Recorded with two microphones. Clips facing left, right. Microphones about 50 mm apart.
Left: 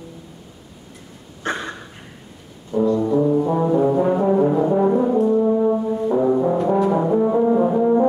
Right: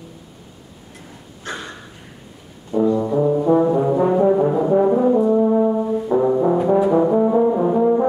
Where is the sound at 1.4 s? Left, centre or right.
Left.